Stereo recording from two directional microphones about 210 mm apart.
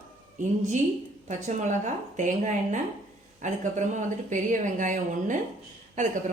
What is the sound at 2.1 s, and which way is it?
Speech, 35° right (ahead or behind).